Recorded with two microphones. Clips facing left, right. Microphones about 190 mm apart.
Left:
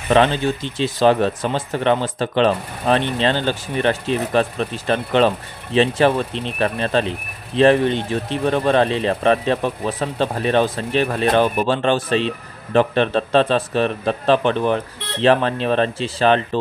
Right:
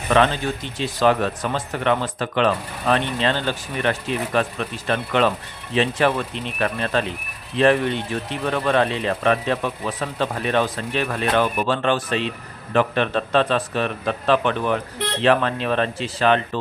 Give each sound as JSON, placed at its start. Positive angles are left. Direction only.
{"t": 0.1, "sound": "speech", "side_deg": 30}